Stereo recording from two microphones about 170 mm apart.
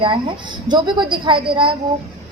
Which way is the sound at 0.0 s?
30° right (ahead or behind).